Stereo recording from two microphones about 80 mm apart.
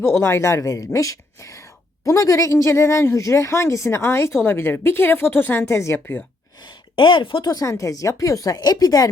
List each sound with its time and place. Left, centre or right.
0.0 s a woman's voice: left
6.6 s a woman's voice: left
7.5 s a woman's voice: left